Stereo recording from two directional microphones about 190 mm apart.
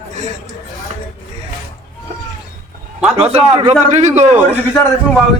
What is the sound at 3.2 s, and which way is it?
Speech, 30° right (ahead or behind).